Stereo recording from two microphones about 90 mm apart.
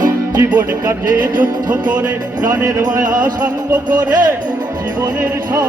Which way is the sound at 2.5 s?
35° right (ahead or behind).